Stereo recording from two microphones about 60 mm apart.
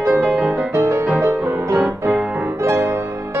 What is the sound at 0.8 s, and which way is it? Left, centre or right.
Music, right.